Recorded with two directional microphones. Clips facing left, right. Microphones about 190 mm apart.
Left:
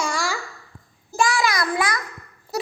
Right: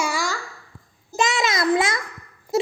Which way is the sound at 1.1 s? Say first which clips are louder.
Left 1 dB; 20° right (ahead or behind).